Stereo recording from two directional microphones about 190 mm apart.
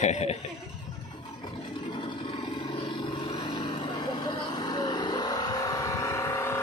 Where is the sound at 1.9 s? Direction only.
25° left (ahead or behind).